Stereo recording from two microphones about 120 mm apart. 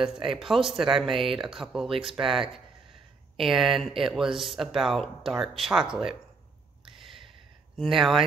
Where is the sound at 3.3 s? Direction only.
Centre (ahead or behind).